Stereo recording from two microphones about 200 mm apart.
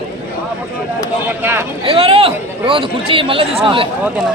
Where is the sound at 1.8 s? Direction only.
30° right (ahead or behind).